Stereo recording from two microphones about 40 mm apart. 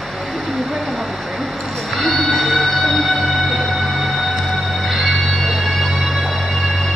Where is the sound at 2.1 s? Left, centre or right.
Centre.